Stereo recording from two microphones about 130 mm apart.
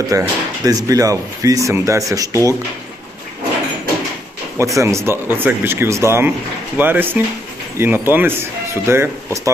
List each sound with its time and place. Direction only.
0.1 s speech: 25° right (ahead or behind)
4.5 s speech: 25° right (ahead or behind)